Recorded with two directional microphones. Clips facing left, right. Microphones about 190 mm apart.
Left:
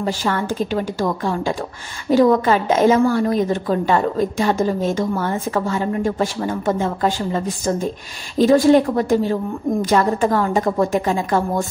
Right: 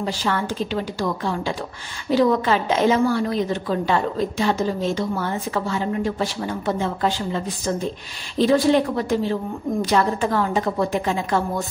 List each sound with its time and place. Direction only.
0.0 s a woman's voice: 45° left (ahead or behind)